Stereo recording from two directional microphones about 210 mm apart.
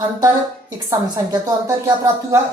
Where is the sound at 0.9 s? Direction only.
15° right (ahead or behind).